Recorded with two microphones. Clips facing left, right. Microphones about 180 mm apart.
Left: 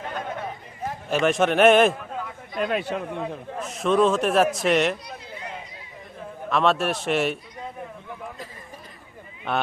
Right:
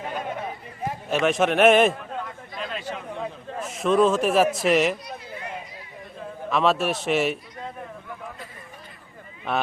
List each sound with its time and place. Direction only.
0.9 s a man's voice: centre (ahead or behind)
2.6 s speech: 60° left (ahead or behind)
3.2 s a man's voice: centre (ahead or behind)
6.5 s a man's voice: centre (ahead or behind)